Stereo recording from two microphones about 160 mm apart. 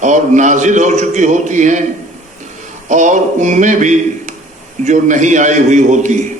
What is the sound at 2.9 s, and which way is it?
A man's voice, 50° right (ahead or behind).